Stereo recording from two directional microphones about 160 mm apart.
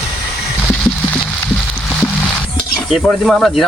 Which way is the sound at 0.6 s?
5° left (ahead or behind).